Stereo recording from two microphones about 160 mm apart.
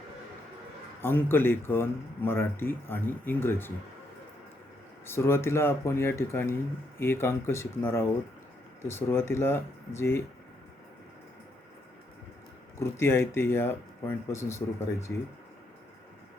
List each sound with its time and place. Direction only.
1.0 s speech: 15° left (ahead or behind)
5.0 s speech: 15° left (ahead or behind)
12.8 s speech: 15° left (ahead or behind)